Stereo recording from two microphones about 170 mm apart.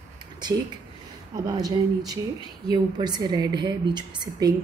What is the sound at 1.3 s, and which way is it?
A woman's voice, 20° right (ahead or behind).